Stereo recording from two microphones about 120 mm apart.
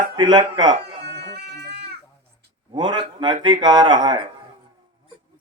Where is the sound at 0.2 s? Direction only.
40° right (ahead or behind).